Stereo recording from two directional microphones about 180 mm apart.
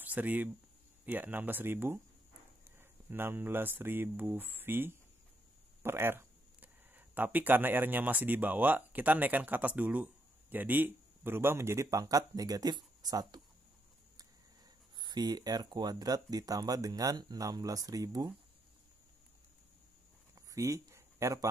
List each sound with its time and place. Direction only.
0.0 s speech: 10° right (ahead or behind)
3.1 s speech: 10° right (ahead or behind)
15.0 s speech: 25° right (ahead or behind)
20.3 s a sound: 15° right (ahead or behind)